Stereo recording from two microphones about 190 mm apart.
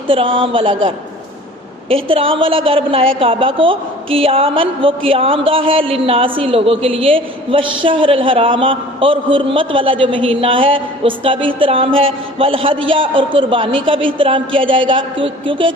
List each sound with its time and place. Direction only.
0.1 s speech: 30° right (ahead or behind)
2.0 s speech: 30° right (ahead or behind)